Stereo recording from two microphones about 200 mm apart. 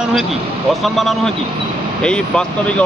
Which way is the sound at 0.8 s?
Centre (ahead or behind).